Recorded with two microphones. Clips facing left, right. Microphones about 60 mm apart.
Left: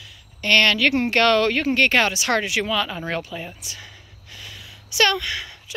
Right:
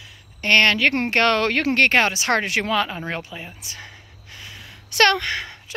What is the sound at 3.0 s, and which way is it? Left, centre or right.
Speech, right.